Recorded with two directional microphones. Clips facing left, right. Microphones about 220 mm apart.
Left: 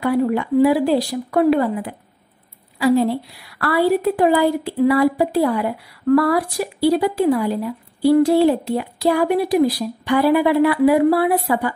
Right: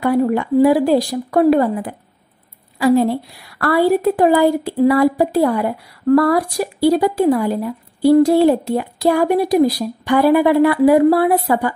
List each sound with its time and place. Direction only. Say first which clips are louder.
0.0 s a woman's voice: right 2 dB; 45° right (ahead or behind)